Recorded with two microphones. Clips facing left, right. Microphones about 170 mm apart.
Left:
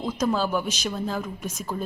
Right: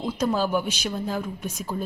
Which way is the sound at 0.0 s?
10° right (ahead or behind).